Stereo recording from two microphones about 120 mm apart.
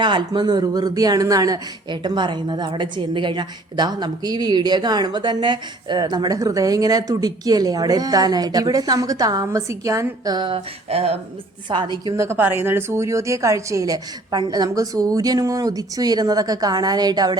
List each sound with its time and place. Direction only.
0.0 s speech: 40° right (ahead or behind)
10.8 s a woman's voice: 60° right (ahead or behind)
11.7 s speech: 40° right (ahead or behind)
12.1 s speech: 25° right (ahead or behind)